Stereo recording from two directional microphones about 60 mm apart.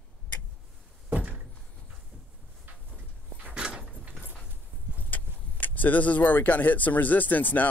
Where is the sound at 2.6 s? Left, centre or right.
Right.